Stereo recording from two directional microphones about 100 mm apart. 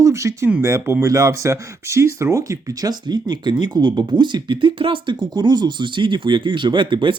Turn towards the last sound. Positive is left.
turn(degrees=-55)  # may be behind; listen again after turning